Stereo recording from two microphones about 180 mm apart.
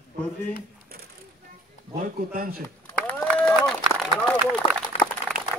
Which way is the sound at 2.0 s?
50° right (ahead or behind).